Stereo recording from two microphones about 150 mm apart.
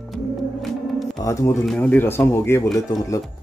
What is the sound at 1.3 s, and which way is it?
Speech, 20° left (ahead or behind).